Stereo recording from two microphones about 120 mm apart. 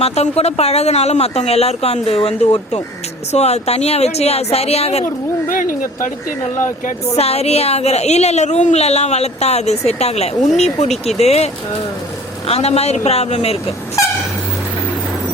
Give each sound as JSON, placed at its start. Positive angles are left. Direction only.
{"t": 0.0, "sound": "a woman's voice", "side_deg": 60}
{"t": 6.6, "sound": "a woman's voice", "side_deg": 75}